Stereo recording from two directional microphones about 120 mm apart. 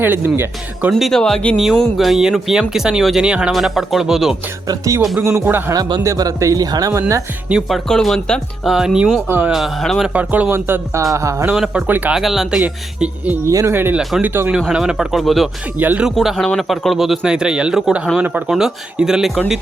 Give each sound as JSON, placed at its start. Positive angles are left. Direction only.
{"t": 0.0, "sound": "speech", "side_deg": -15}
{"t": 0.9, "sound": "speech", "side_deg": 0}
{"t": 5.5, "sound": "speech", "side_deg": -15}
{"t": 5.7, "sound": "speech", "side_deg": -30}
{"t": 7.4, "sound": "speech", "side_deg": -5}
{"t": 7.9, "sound": "speech", "side_deg": 5}
{"t": 10.1, "sound": "speech", "side_deg": -10}
{"t": 11.4, "sound": "speech", "side_deg": -5}
{"t": 12.2, "sound": "speech", "side_deg": 0}
{"t": 13.4, "sound": "speech", "side_deg": -25}
{"t": 15.8, "sound": "speech", "side_deg": -15}
{"t": 16.0, "sound": "speech", "side_deg": 0}